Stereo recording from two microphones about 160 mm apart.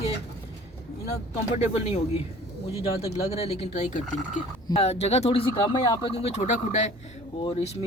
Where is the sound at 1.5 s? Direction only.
40° left (ahead or behind).